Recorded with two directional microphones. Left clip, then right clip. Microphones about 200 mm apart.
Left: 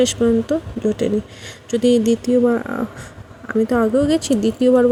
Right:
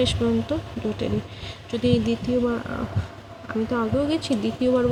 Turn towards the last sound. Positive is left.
turn(degrees=35)  # may be behind; listen again after turning